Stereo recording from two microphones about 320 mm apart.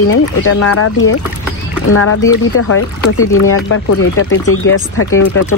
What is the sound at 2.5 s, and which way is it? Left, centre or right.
Speech, left.